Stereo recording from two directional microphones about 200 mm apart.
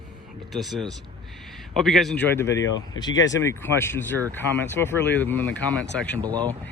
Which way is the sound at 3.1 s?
65° left (ahead or behind).